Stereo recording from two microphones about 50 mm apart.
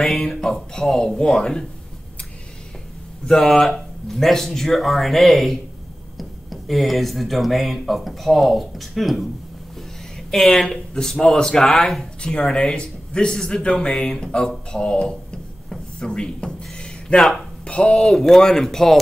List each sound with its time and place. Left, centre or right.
0.0 s speech: centre
3.3 s speech: centre
10.3 s a man's voice: centre
14.7 s drawer open or close: centre
16.7 s a sound: centre
17.6 s a man's voice: left
18.0 s speech: centre